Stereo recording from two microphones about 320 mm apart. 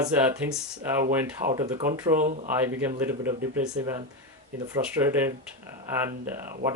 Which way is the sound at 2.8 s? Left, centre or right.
Centre.